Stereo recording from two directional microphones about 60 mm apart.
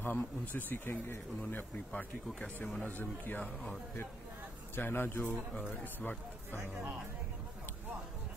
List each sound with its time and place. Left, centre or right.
0.0 s speech: left
1.9 s speech: centre
4.7 s speech: left